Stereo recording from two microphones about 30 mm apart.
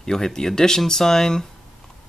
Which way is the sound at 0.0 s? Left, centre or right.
Centre.